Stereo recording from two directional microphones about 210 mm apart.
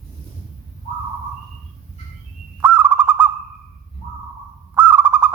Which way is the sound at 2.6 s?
5° right (ahead or behind).